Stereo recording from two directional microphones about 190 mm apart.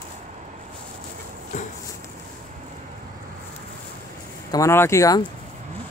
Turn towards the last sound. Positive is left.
turn(degrees=20)  # may be behind; listen again after turning